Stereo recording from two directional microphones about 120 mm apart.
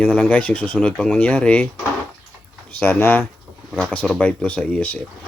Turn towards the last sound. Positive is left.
turn(degrees=10)  # may be behind; listen again after turning